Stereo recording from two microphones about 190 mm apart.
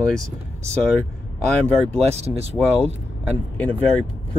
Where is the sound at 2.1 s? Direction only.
35° right (ahead or behind).